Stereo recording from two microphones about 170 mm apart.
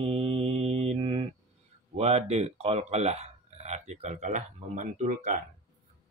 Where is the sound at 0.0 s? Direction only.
35° right (ahead or behind).